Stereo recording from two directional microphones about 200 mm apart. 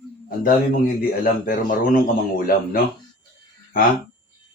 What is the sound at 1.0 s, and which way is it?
A man's voice, 45° left (ahead or behind).